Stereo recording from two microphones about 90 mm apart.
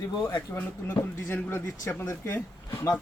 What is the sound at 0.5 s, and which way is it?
Speech, 25° left (ahead or behind).